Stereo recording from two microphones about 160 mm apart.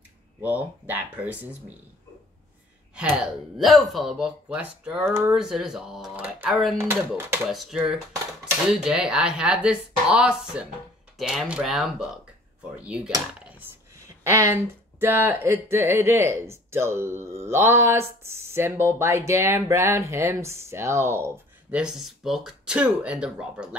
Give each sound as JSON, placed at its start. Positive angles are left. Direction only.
{"t": 0.4, "sound": "speech", "side_deg": -10}
{"t": 3.0, "sound": "speech", "side_deg": -5}
{"t": 7.5, "sound": "speech", "side_deg": -5}